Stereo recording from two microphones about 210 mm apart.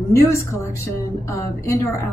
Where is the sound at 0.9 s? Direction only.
15° left (ahead or behind).